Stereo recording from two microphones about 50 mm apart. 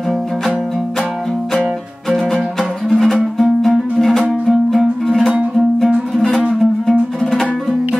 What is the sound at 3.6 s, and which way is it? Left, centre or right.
Music, centre.